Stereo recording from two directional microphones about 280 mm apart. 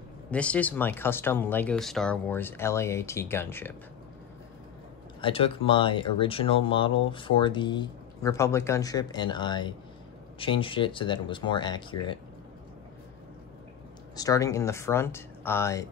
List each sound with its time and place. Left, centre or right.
0.3 s speech: centre
5.2 s speech: centre
14.1 s speech: centre